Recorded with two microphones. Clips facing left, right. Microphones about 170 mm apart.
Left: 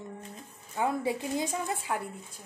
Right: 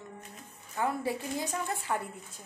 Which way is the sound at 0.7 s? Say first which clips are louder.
Left 2 dB; 15° left (ahead or behind).